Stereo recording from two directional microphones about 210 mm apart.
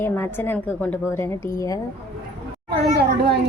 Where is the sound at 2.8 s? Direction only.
50° right (ahead or behind).